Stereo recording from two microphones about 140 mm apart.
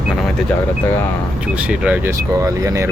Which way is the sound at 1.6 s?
10° right (ahead or behind).